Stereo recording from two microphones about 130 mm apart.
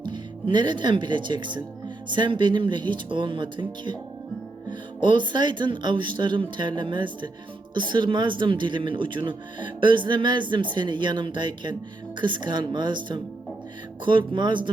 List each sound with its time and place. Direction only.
0.0 s a man's voice: 35° right (ahead or behind)